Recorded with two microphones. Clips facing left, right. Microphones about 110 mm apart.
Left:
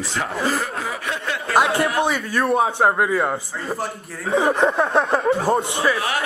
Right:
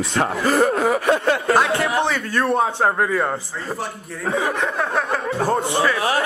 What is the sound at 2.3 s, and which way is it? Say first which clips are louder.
Speech: even; 10° left (ahead or behind).